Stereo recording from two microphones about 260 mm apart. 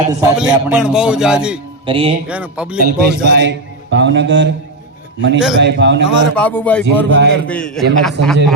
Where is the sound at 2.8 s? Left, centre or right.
Right.